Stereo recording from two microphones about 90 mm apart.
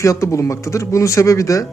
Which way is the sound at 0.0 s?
35° left (ahead or behind).